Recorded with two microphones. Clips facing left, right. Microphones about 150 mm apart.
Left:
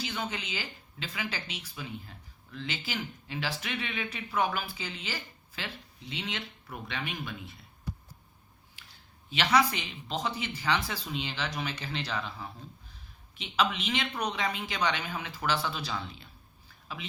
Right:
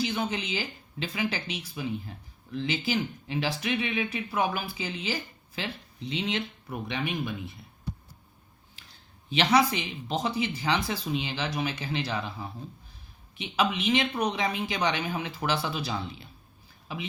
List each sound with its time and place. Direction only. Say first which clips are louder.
0.0 s speech: right 6 dB; 15° right (ahead or behind)
9.4 s speech: right 3 dB; 15° right (ahead or behind)
13.6 s speech: right 4 dB; 15° right (ahead or behind)